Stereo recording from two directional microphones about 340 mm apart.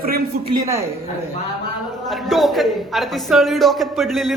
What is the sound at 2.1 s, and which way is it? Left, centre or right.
Speech, centre.